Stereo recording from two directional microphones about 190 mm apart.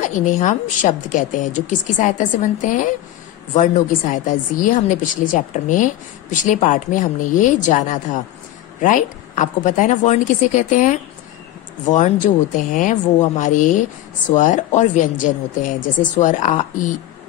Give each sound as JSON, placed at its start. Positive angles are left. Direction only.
{"t": 0.0, "sound": "a woman's voice", "side_deg": 40}